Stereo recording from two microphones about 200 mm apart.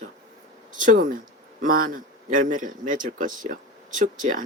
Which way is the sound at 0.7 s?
40° right (ahead or behind).